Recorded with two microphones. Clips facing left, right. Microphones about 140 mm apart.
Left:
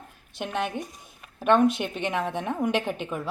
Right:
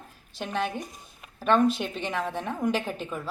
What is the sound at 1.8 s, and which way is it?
A woman's voice, 15° left (ahead or behind).